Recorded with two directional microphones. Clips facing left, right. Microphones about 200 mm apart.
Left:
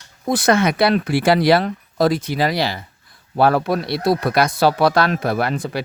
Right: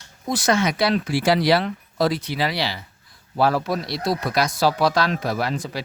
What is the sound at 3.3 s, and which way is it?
Speech, 60° left (ahead or behind).